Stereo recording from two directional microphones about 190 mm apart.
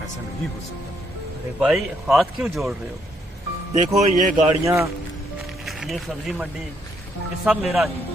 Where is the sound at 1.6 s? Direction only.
Centre (ahead or behind).